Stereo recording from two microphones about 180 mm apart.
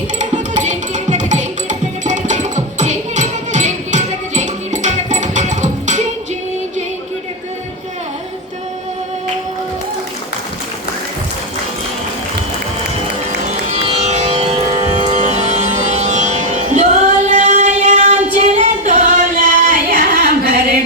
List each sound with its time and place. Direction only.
0.2 s music: 45° right (ahead or behind)
13.7 s music: 40° right (ahead or behind)
18.3 s singing: 45° right (ahead or behind)